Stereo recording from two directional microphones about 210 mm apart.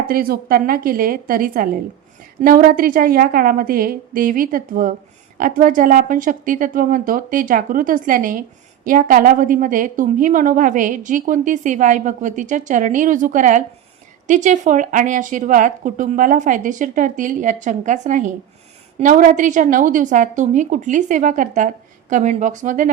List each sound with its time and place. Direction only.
0.1 s a woman's voice: 45° right (ahead or behind)